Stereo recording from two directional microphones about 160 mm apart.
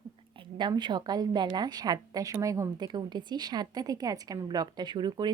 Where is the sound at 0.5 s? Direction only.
30° right (ahead or behind).